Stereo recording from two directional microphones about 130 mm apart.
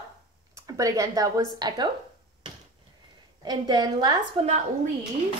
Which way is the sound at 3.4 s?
30° right (ahead or behind).